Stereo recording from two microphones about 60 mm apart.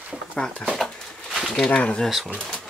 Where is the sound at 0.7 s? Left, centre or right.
Centre.